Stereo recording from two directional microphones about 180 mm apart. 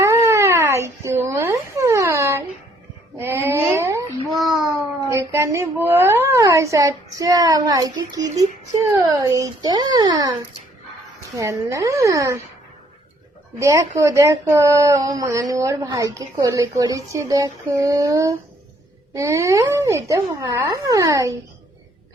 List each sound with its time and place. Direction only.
0.0 s a sound: 15° right (ahead or behind)
3.2 s babbling: 15° right (ahead or behind)
4.4 s a sound: centre (ahead or behind)
5.0 s a woman's voice: 15° right (ahead or behind)
11.3 s speech: 15° right (ahead or behind)
13.6 s speech: 15° right (ahead or behind)